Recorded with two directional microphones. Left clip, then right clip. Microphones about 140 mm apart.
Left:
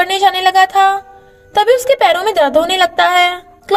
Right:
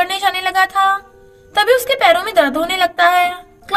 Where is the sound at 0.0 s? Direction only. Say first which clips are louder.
Left 5 dB; 35° left (ahead or behind).